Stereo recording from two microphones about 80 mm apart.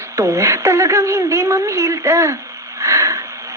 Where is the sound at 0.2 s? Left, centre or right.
Right.